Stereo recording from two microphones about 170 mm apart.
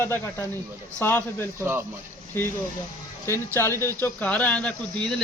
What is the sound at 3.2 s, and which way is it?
Speech, 15° left (ahead or behind).